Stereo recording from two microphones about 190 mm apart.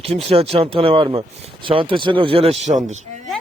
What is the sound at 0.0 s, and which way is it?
Speech, 30° right (ahead or behind).